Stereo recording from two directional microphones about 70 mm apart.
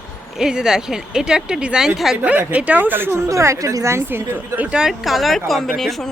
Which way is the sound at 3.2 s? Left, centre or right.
Right.